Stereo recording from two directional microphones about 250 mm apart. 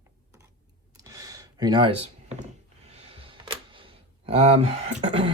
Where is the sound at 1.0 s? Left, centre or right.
Centre.